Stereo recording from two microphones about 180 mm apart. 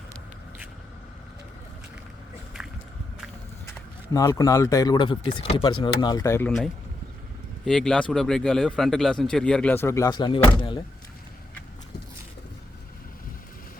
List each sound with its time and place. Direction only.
4.1 s speech: 20° left (ahead or behind)
7.6 s speech: centre (ahead or behind); by 10.8 s 30° left (ahead or behind)